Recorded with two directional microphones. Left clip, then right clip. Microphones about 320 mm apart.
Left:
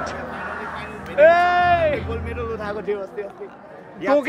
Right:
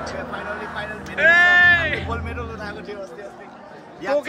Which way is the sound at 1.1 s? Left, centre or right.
Centre.